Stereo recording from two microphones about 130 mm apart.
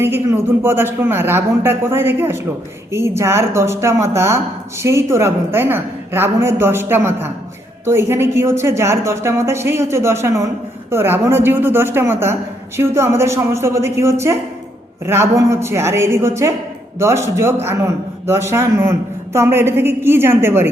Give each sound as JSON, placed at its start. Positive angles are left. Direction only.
{"t": 0.0, "sound": "a man's voice", "side_deg": -20}